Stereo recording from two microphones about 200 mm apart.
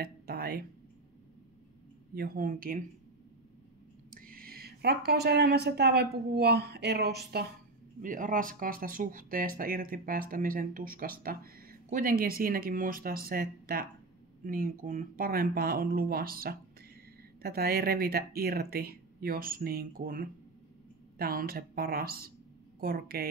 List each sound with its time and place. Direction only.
0.0 s a sound: 50° right (ahead or behind)
2.1 s speech: 45° right (ahead or behind)
4.1 s speech: 45° right (ahead or behind)
8.0 s speech: 40° right (ahead or behind)